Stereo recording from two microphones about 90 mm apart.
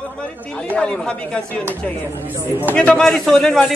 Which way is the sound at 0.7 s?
10° left (ahead or behind).